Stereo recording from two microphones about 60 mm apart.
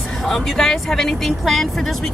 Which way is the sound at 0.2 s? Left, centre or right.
Centre.